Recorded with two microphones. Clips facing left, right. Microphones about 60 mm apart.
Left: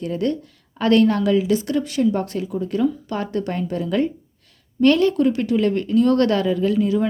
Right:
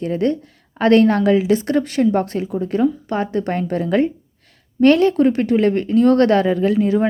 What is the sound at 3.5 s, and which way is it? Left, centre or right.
Speech, right.